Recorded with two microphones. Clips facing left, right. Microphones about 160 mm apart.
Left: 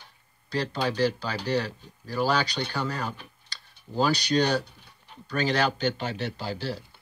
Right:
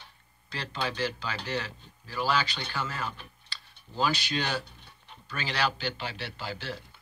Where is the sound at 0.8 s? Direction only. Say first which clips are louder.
Left 5 dB; 40° left (ahead or behind).